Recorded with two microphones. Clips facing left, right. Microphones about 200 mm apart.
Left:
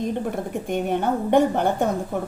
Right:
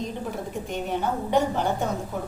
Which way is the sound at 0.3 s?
55° left (ahead or behind).